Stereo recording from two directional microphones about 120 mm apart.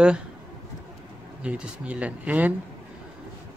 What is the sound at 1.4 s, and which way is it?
Speech, 10° right (ahead or behind).